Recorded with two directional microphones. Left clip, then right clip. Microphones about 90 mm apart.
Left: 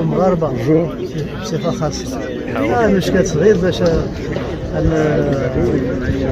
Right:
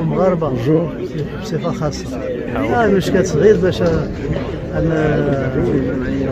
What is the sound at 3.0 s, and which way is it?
Speech, 45° right (ahead or behind).